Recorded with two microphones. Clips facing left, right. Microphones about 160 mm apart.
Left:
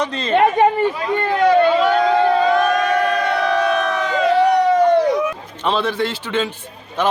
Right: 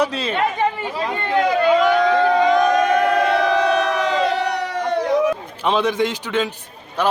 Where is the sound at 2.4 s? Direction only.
15° right (ahead or behind).